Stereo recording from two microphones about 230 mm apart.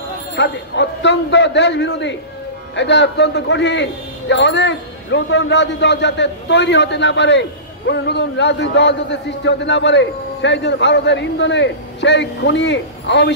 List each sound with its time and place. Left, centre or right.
0.4 s a man's voice: left